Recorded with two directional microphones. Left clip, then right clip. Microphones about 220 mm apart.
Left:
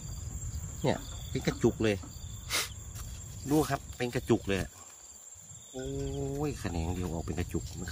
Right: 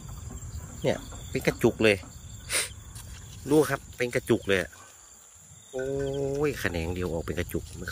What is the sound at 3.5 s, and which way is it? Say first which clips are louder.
Speech: right 6 dB; centre (ahead or behind).